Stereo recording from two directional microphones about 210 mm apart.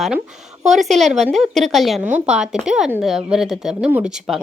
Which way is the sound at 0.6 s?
Centre (ahead or behind).